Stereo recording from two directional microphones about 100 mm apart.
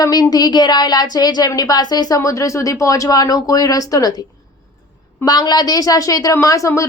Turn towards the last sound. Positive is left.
turn(degrees=30)  # may be behind; listen again after turning